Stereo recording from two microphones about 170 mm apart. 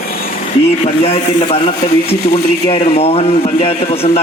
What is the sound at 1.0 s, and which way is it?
Speech, 35° left (ahead or behind).